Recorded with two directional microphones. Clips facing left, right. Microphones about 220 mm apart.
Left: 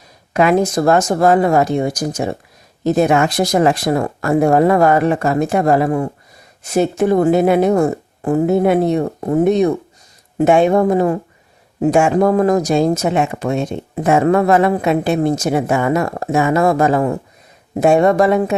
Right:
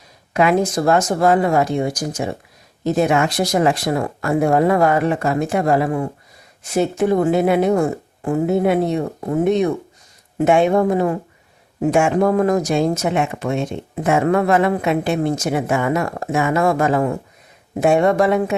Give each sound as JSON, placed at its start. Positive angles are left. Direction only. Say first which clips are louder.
{"t": 0.3, "sound": "speech", "louder": "left 3 dB", "side_deg": 40}